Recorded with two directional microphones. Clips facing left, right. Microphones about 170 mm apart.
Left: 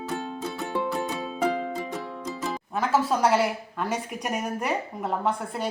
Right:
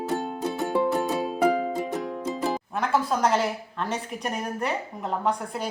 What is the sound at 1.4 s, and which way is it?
Music, 15° right (ahead or behind).